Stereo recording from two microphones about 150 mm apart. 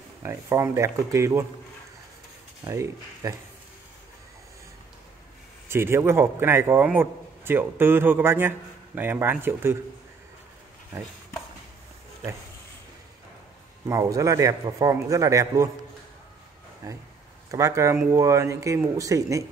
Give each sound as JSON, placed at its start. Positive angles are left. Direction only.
{"t": 0.2, "sound": "a man's voice", "side_deg": -20}
{"t": 2.6, "sound": "a man's voice", "side_deg": -20}
{"t": 5.7, "sound": "a man's voice", "side_deg": -15}
{"t": 13.8, "sound": "a man's voice", "side_deg": -25}
{"t": 16.8, "sound": "a man's voice", "side_deg": -20}